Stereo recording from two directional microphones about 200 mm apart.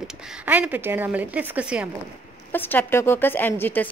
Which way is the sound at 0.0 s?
5° right (ahead or behind).